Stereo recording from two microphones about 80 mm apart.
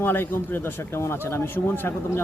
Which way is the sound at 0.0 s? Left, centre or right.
Left.